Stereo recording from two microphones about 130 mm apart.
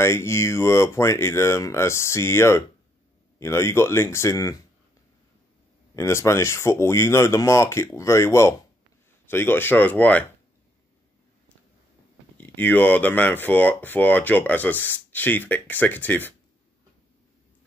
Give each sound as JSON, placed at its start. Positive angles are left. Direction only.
{"t": 0.0, "sound": "speech", "side_deg": 20}
{"t": 5.9, "sound": "speech", "side_deg": 20}
{"t": 12.4, "sound": "speech", "side_deg": 15}